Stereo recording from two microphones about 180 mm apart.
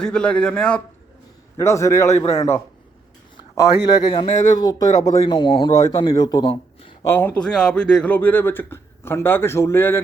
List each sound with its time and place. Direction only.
0.0 s a man's voice: 5° left (ahead or behind)
1.5 s speech: 15° left (ahead or behind)
2.1 s a man's voice: 35° left (ahead or behind)
3.3 s a sound: 15° left (ahead or behind)
3.8 s speech: 25° left (ahead or behind)